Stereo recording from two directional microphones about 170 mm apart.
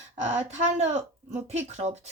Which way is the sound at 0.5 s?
40° right (ahead or behind).